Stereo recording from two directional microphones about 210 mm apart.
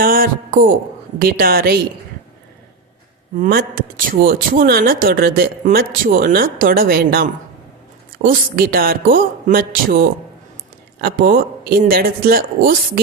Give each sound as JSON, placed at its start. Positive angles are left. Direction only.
{"t": 0.0, "sound": "hum", "side_deg": -45}
{"t": 1.2, "sound": "speech", "side_deg": -45}
{"t": 3.3, "sound": "speech", "side_deg": -40}